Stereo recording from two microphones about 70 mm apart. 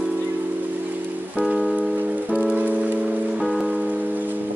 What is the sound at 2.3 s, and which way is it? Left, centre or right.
Music, centre.